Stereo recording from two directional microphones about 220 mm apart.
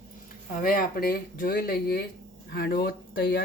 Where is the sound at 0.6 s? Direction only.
40° left (ahead or behind).